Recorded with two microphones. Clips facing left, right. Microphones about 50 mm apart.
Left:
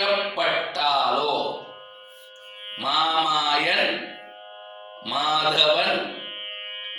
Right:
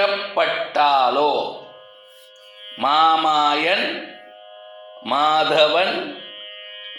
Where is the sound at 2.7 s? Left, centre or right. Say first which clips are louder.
Right 7 dB; right.